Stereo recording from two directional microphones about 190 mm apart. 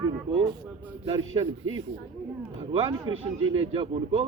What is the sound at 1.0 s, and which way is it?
Speech, 25° right (ahead or behind).